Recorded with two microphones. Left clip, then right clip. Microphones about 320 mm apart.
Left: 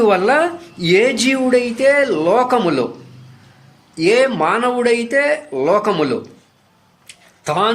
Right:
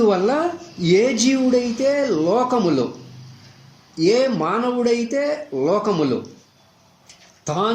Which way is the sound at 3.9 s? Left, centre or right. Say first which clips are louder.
Left 4 dB; left.